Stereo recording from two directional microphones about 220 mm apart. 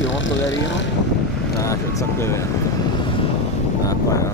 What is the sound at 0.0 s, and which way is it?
Speech, 55° left (ahead or behind).